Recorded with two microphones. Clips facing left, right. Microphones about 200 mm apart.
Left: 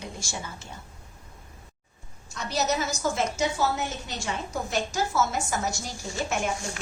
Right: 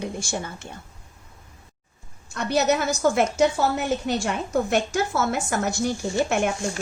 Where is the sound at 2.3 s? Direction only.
60° right (ahead or behind).